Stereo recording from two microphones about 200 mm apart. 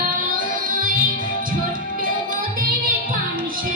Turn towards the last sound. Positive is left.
turn(degrees=-45)  # may be behind; listen again after turning